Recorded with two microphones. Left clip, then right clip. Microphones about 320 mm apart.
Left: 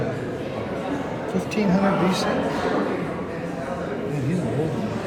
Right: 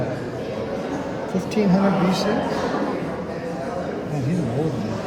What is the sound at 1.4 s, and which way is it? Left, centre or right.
Speech, right.